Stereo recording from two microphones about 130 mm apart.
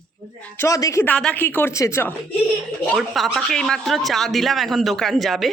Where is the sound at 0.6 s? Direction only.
25° left (ahead or behind).